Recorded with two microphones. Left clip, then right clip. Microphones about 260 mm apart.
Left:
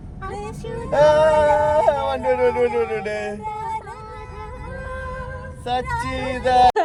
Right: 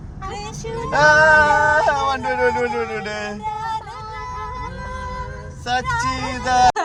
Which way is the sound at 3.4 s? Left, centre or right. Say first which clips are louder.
Right 2 dB; right.